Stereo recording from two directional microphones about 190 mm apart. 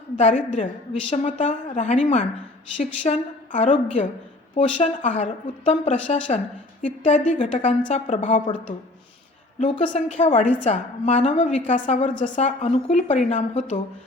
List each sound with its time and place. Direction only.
0.2 s a woman's voice: 35° left (ahead or behind)
9.6 s a woman's voice: 35° left (ahead or behind)